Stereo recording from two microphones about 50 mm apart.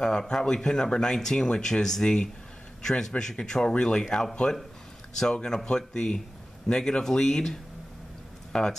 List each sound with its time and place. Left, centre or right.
0.0 s speech: centre
8.5 s speech: centre